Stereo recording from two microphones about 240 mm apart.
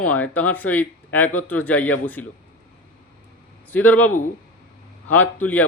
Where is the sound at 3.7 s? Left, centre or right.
Centre.